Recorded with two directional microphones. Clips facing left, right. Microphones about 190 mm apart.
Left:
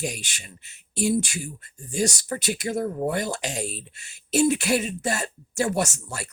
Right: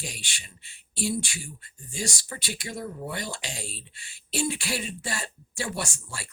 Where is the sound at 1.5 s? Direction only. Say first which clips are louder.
Left 11 dB; 40° left (ahead or behind).